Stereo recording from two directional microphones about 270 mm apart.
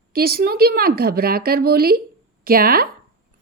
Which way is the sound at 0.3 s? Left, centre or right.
Right.